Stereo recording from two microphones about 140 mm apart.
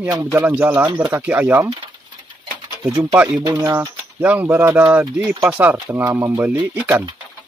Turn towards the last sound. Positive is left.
turn(degrees=-15)  # may be behind; listen again after turning